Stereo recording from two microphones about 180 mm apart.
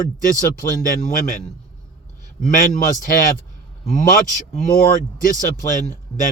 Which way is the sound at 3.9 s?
45° left (ahead or behind).